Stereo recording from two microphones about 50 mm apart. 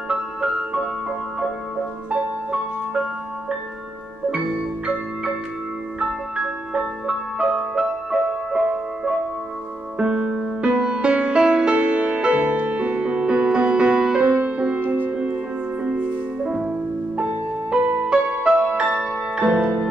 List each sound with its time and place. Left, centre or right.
0.1 s music: centre
2.0 s music: right
4.3 s music: centre
9.9 s music: centre
14.2 s music: right
14.8 s music: right
15.8 s music: right
16.4 s music: centre
17.2 s music: right